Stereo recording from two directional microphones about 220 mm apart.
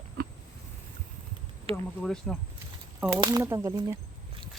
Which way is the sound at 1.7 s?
25° right (ahead or behind).